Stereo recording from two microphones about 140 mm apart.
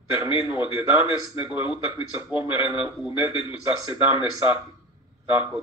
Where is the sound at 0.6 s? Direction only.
35° left (ahead or behind).